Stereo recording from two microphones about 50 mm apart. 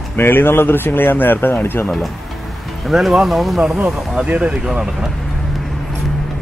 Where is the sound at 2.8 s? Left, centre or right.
Centre.